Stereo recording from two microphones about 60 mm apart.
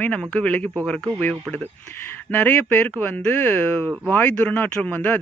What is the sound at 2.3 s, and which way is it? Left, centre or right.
Speech, left.